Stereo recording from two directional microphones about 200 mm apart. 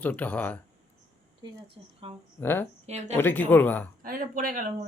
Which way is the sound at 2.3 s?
10° left (ahead or behind).